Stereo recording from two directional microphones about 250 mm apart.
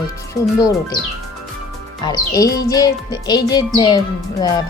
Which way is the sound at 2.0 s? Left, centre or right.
Centre.